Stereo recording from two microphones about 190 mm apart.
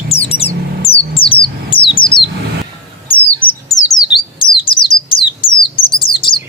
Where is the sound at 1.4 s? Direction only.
25° left (ahead or behind).